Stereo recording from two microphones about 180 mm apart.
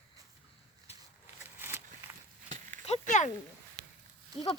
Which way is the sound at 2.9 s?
40° left (ahead or behind).